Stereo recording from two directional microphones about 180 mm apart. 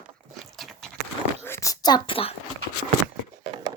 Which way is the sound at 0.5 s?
Centre (ahead or behind).